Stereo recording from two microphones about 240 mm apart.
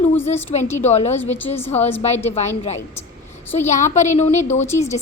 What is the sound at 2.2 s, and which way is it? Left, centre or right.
Speech, left.